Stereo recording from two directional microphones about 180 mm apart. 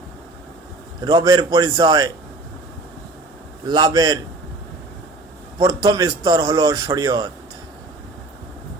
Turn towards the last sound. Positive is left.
turn(degrees=-20)  # may be behind; listen again after turning